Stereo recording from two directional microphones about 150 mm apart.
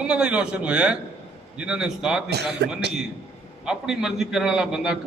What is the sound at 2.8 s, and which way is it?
Speech, 90° right.